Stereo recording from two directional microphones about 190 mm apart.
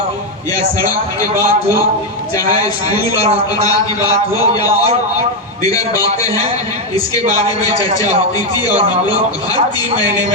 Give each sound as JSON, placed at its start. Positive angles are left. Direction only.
{"t": 4.0, "sound": "a man's voice", "side_deg": 20}